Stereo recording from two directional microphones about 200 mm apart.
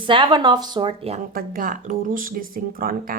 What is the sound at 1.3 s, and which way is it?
Speech, 45° right (ahead or behind).